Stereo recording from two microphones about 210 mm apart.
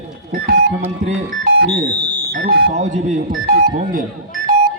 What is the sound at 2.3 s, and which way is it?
Smoke detector, 40° right (ahead or behind).